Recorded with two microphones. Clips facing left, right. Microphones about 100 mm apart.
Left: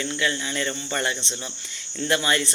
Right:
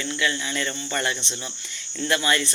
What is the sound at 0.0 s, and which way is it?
Speech, 30° left (ahead or behind).